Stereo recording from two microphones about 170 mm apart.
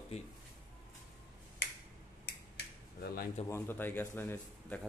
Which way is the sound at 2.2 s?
70° left (ahead or behind).